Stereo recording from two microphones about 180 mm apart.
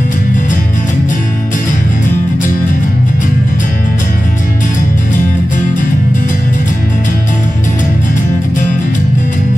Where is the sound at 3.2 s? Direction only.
45° left (ahead or behind).